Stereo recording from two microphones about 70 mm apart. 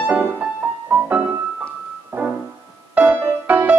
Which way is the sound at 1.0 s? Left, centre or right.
Right.